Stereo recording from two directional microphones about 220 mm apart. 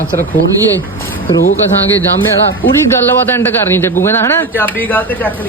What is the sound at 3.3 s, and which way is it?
Speech, 10° left (ahead or behind).